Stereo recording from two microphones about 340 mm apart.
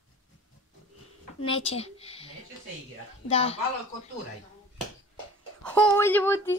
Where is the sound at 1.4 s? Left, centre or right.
Centre.